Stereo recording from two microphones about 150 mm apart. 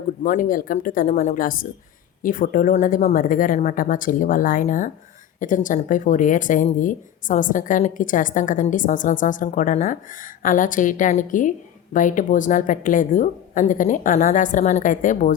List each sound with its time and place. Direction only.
0.2 s speech: 60° left (ahead or behind)